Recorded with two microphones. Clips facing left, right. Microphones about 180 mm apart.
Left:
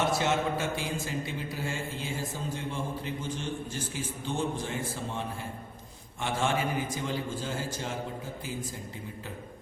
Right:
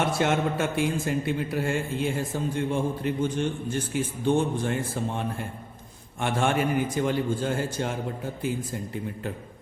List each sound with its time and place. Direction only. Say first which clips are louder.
0.0 s mantra: right 3 dB; 60° right (ahead or behind)